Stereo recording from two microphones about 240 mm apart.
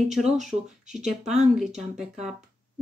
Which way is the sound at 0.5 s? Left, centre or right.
Right.